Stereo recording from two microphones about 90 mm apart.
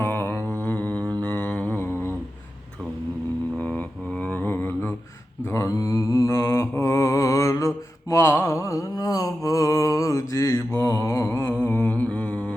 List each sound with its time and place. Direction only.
0.0 s mantra: 20° left (ahead or behind)
1.2 s a sound: 20° left (ahead or behind)
3.6 s mantra: 15° left (ahead or behind)
5.5 s mantra: 35° left (ahead or behind)
11.5 s humming: 20° left (ahead or behind)